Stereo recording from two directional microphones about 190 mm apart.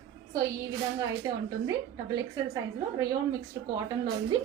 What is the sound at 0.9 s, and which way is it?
A woman's voice, 15° right (ahead or behind).